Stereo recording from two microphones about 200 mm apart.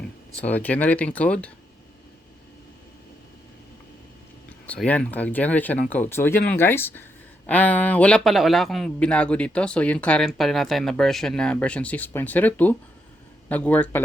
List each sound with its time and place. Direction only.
0.3 s speech: 10° left (ahead or behind)
4.6 s speech: 5° left (ahead or behind)